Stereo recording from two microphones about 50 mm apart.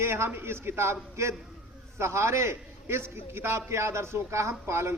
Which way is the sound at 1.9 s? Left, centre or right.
Right.